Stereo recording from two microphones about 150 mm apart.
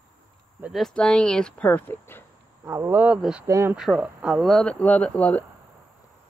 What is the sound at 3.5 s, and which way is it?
Speech, 20° right (ahead or behind).